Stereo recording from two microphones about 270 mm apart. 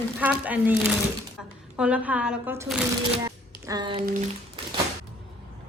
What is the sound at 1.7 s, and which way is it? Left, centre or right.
A woman's voice, centre.